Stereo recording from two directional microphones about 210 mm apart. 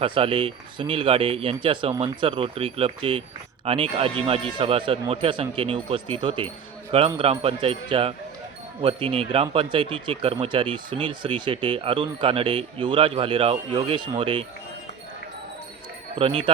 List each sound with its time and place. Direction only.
0.0 s speech: 25° right (ahead or behind)
16.1 s speech: 25° right (ahead or behind)